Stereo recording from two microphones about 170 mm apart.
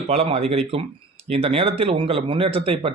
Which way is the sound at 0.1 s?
35° right (ahead or behind).